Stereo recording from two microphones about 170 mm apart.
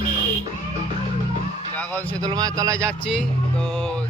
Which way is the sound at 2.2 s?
20° right (ahead or behind).